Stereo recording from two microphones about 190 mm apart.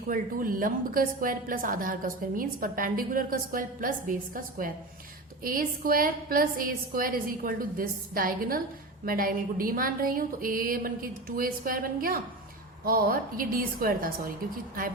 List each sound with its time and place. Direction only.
0.1 s a woman's voice: 45° right (ahead or behind)